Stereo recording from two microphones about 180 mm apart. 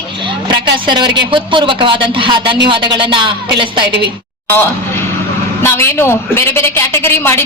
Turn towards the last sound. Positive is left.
turn(degrees=15)  # may be behind; listen again after turning